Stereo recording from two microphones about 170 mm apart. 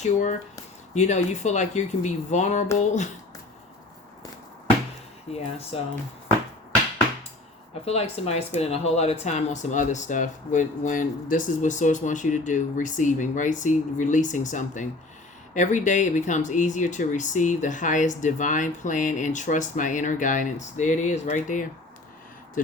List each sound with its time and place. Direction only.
0.0 s speech: 45° left (ahead or behind)
5.3 s speech: 35° left (ahead or behind)
7.9 s speech: 35° left (ahead or behind); by 22.7 s 50° left (ahead or behind)